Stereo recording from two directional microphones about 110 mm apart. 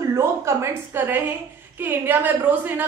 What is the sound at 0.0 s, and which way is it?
A woman's voice, 25° right (ahead or behind).